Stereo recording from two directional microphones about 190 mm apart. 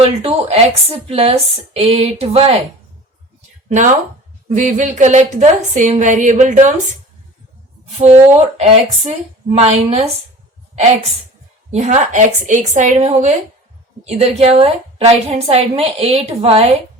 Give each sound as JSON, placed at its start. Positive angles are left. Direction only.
{"t": 0.0, "sound": "a woman's voice", "side_deg": -30}
{"t": 4.5, "sound": "a woman's voice", "side_deg": -40}
{"t": 7.9, "sound": "a woman's voice", "side_deg": -35}
{"t": 11.7, "sound": "a woman's voice", "side_deg": -35}